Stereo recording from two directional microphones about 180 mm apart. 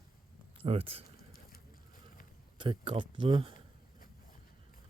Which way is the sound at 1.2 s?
55° left (ahead or behind).